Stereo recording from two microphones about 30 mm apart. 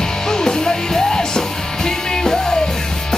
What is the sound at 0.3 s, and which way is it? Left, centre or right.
Music, left.